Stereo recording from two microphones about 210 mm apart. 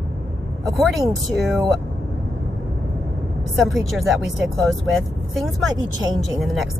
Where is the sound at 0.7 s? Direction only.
Centre (ahead or behind).